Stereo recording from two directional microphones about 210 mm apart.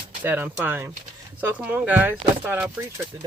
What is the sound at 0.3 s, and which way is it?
Speech, 10° right (ahead or behind).